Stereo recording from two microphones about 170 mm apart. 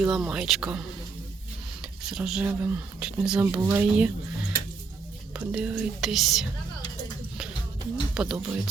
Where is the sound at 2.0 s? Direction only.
5° right (ahead or behind).